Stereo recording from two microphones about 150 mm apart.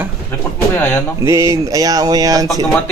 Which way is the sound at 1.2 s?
20° right (ahead or behind).